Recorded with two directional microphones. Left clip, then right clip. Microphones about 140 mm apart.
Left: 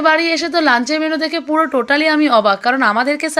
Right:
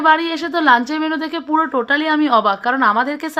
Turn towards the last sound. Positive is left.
turn(degrees=15)  # may be behind; listen again after turning